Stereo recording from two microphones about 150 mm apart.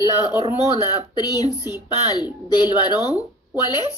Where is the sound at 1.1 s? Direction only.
25° left (ahead or behind).